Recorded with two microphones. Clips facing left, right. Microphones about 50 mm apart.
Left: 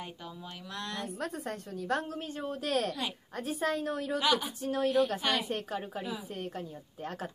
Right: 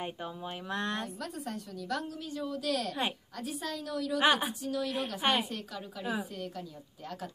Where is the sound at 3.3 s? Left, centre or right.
Left.